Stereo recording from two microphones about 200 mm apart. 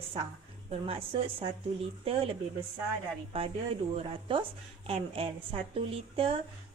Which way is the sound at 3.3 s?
30° right (ahead or behind).